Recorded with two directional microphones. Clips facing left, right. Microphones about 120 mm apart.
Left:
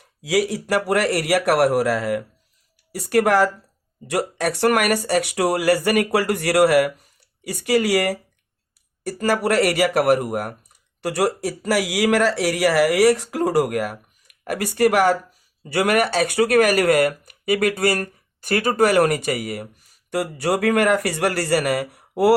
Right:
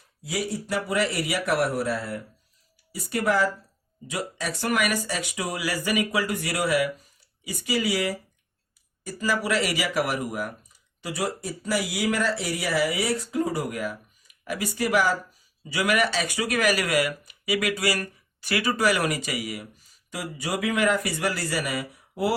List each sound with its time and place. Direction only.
0.0 s speech: 90° left
2.9 s a man's voice: 70° left (ahead or behind)